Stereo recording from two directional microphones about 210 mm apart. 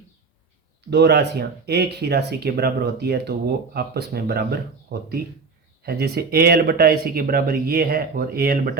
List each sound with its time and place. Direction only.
0.9 s speech: 50° right (ahead or behind)